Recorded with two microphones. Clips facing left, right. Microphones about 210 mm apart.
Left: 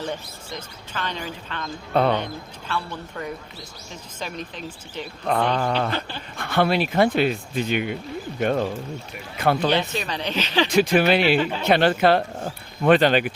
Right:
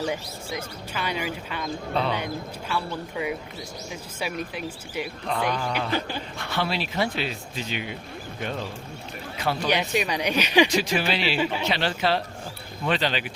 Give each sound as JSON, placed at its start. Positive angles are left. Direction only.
{"t": 0.0, "sound": "speech", "side_deg": -10}
{"t": 1.9, "sound": "speech", "side_deg": 50}
{"t": 2.1, "sound": "speech", "side_deg": -10}
{"t": 5.2, "sound": "speech", "side_deg": 55}
{"t": 5.9, "sound": "speech", "side_deg": -15}
{"t": 6.3, "sound": "speech", "side_deg": 55}
{"t": 9.6, "sound": "speech", "side_deg": -15}
{"t": 10.7, "sound": "speech", "side_deg": 55}